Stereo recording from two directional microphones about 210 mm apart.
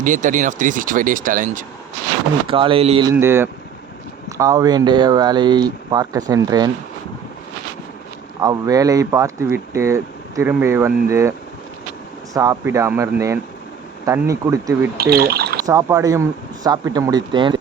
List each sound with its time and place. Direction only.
0.0 s speech: 40° right (ahead or behind)
2.5 s speech: 25° right (ahead or behind)
3.1 s speech: 10° right (ahead or behind)
8.4 s speech: 15° right (ahead or behind)
14.9 s speech: 45° right (ahead or behind)
15.6 s speech: 15° right (ahead or behind)